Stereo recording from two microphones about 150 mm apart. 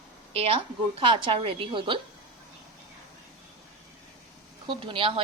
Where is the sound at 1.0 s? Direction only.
30° right (ahead or behind).